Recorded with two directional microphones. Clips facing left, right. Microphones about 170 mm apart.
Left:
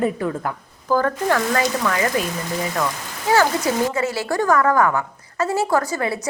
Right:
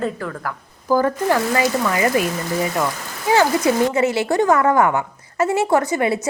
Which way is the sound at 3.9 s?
20° right (ahead or behind).